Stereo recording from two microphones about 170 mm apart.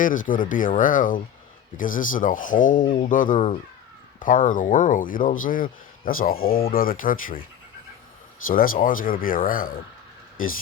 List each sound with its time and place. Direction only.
0.0 s speech: 50° left (ahead or behind)
8.4 s speech: 55° left (ahead or behind)